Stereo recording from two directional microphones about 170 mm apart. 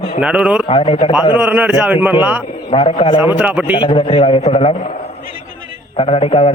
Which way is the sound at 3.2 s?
10° right (ahead or behind).